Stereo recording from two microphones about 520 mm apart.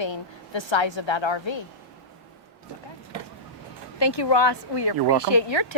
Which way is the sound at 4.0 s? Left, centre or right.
Left.